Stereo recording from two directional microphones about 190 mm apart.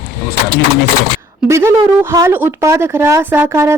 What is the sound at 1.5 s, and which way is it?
Speech, 15° right (ahead or behind).